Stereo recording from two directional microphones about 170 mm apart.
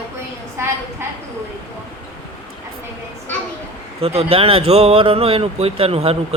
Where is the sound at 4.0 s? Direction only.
35° right (ahead or behind).